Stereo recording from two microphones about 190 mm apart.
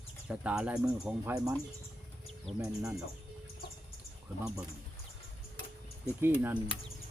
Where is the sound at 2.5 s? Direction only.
Centre (ahead or behind).